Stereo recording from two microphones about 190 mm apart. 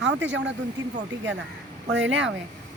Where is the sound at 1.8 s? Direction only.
70° right (ahead or behind).